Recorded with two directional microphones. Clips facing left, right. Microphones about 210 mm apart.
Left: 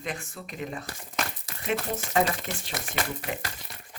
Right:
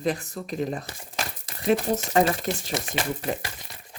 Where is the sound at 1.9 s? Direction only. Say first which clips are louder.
Right 4 dB; 40° right (ahead or behind).